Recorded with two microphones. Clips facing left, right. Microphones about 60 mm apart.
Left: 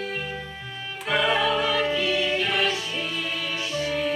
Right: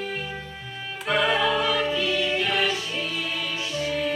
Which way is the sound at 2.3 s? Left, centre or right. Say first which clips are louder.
Even; centre.